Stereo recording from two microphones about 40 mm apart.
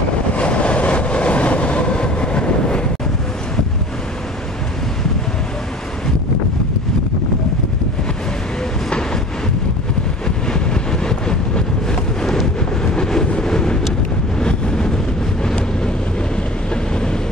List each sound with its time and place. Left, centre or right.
0.3 s train: left
10.2 s vehicle: centre